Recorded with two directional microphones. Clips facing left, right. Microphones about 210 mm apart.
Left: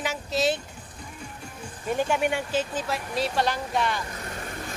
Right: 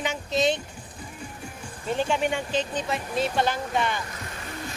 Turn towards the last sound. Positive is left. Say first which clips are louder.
# even
turn(degrees=0)  # may be behind; listen again after turning